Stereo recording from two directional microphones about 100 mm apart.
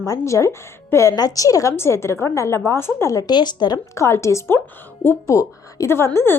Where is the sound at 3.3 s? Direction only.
45° left (ahead or behind).